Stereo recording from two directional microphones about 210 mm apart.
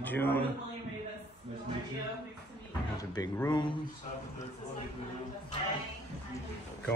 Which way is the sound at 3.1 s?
20° left (ahead or behind).